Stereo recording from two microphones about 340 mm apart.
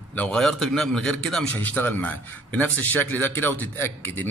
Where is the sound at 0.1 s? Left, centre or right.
Centre.